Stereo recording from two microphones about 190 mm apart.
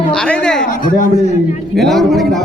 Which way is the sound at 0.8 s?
45° left (ahead or behind).